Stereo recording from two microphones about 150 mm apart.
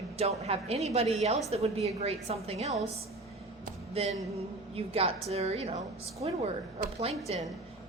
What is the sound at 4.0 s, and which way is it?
A woman's voice, 40° right (ahead or behind).